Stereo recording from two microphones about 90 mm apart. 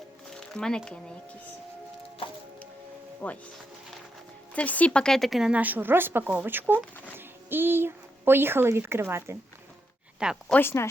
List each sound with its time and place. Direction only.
0.3 s music: 10° left (ahead or behind)
3.2 s a woman's voice: 15° left (ahead or behind)
4.5 s a woman's voice: 15° left (ahead or behind); by 5.5 s centre (ahead or behind)
5.5 s speech: 20° right (ahead or behind)
10.5 s speech: 25° left (ahead or behind)